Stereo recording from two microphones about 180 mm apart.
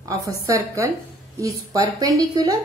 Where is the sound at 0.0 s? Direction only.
15° right (ahead or behind).